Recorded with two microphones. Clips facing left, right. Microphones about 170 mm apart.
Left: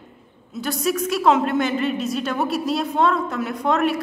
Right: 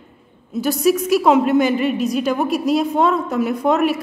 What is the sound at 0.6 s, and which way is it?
A woman's voice, centre (ahead or behind).